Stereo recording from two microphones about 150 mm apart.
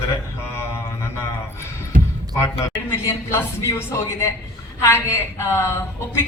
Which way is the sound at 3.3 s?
20° left (ahead or behind).